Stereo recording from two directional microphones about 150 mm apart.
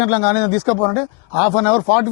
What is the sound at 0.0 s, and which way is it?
Speech, 15° left (ahead or behind).